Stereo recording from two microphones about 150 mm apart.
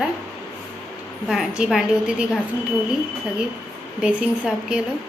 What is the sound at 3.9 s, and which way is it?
Speech, 10° right (ahead or behind).